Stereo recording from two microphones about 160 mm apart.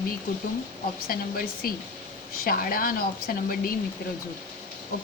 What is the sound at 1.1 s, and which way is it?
A woman's voice, 65° left (ahead or behind).